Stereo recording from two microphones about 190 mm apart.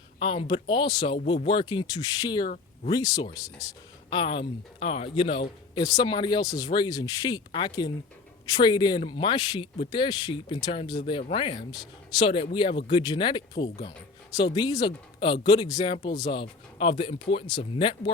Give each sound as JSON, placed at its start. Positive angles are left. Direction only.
{"t": 0.2, "sound": "speech", "side_deg": 30}